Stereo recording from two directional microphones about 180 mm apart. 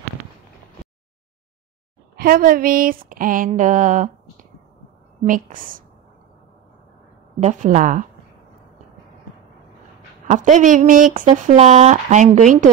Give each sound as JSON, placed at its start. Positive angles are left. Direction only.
{"t": 2.1, "sound": "speech", "side_deg": -55}
{"t": 7.3, "sound": "speech", "side_deg": -45}
{"t": 10.2, "sound": "speech", "side_deg": -45}